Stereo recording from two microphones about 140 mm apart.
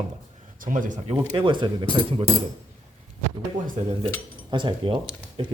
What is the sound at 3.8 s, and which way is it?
Speech, 55° right (ahead or behind).